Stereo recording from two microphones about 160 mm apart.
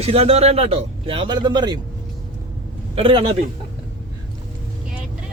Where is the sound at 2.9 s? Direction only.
35° right (ahead or behind).